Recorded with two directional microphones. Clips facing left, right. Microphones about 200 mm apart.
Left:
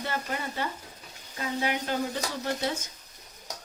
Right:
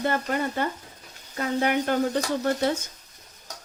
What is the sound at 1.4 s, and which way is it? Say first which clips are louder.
Speech: right 6 dB; 55° right (ahead or behind).